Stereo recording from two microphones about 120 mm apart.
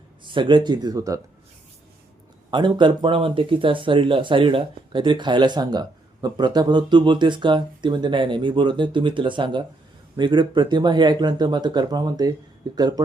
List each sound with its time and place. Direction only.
0.3 s speech: 40° right (ahead or behind)
2.5 s speech: 40° right (ahead or behind)